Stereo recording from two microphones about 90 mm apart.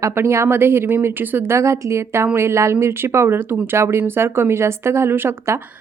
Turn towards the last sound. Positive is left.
turn(degrees=-25)  # may be behind; listen again after turning